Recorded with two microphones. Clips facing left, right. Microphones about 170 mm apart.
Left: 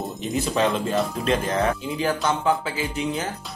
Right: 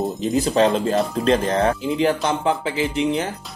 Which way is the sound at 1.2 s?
35° right (ahead or behind).